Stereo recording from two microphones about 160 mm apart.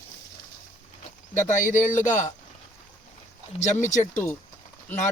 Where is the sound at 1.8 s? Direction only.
50° left (ahead or behind).